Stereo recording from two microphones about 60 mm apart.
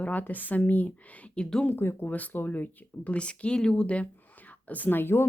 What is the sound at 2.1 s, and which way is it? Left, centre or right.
Speech, left.